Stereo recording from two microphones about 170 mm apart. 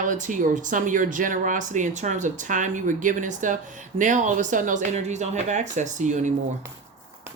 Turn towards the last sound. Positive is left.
turn(degrees=-45)  # may be behind; listen again after turning